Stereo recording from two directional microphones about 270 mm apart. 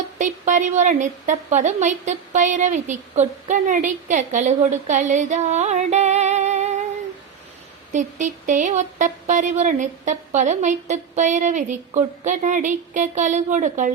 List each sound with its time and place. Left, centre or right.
0.2 s a woman's voice: right
7.9 s a woman's voice: right